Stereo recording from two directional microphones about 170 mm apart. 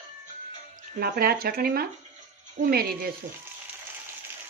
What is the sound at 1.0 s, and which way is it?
Speech, 60° right (ahead or behind).